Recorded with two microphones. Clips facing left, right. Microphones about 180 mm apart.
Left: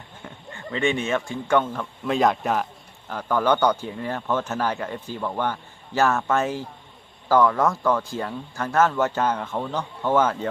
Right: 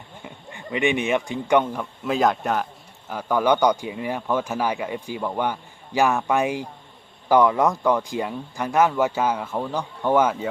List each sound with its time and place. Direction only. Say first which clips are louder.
0.3 s speech: right 1 dB; 15° right (ahead or behind)
2.0 s a man's voice: even; centre (ahead or behind)